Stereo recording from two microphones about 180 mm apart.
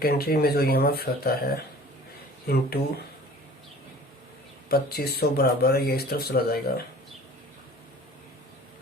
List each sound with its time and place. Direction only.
0.0 s speech: 60° left (ahead or behind)
2.5 s speech: 60° left (ahead or behind)
4.7 s speech: 60° left (ahead or behind)